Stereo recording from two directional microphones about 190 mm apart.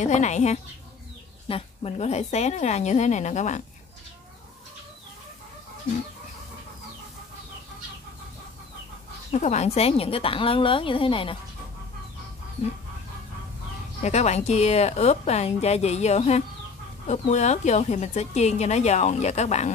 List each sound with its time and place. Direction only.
0.0 s speech: 40° left (ahead or behind)
9.3 s a woman's voice: 40° left (ahead or behind)
14.0 s speech: 35° left (ahead or behind)